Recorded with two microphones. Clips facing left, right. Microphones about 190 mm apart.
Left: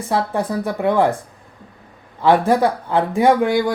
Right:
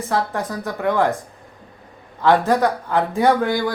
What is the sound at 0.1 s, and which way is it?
Speech, 15° left (ahead or behind).